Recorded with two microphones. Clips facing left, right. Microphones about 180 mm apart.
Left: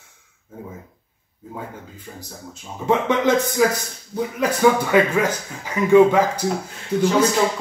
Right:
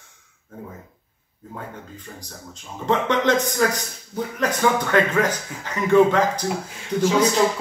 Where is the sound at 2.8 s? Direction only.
10° left (ahead or behind).